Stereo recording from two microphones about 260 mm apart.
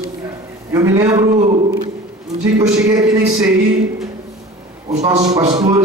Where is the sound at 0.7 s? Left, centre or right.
Centre.